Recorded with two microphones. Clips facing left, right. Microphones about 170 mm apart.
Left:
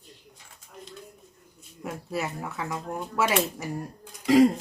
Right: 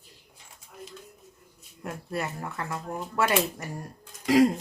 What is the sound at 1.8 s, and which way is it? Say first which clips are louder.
Speech: left 1 dB; 5° left (ahead or behind).